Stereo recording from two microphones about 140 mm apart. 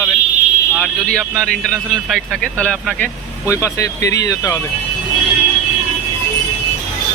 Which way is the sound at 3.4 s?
20° left (ahead or behind).